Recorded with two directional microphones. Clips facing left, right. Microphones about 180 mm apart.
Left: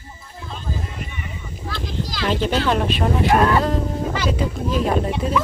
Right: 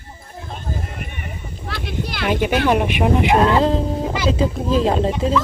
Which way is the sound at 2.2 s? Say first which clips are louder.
Right 3 dB; 10° right (ahead or behind).